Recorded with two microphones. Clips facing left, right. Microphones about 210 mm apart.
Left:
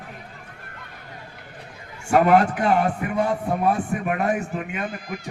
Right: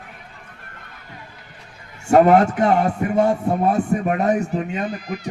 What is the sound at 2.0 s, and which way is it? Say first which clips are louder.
A man's voice: right 4 dB; 25° right (ahead or behind).